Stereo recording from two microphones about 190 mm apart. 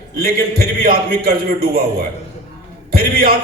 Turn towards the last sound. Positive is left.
turn(degrees=-55)  # may be behind; listen again after turning